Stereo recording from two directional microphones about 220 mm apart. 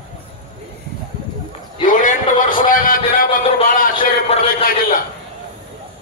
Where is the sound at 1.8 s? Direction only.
35° left (ahead or behind).